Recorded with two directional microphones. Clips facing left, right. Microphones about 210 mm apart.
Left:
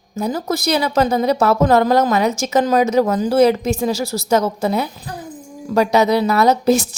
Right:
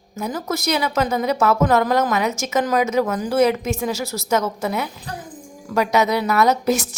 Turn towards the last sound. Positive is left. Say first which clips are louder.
# left 4 dB
turn(degrees=30)  # may be behind; listen again after turning